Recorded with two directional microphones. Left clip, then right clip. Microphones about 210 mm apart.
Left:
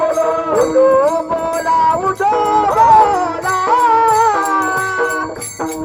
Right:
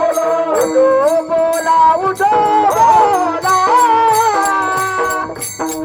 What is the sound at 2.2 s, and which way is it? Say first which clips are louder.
Music: right 2 dB; 50° right (ahead or behind).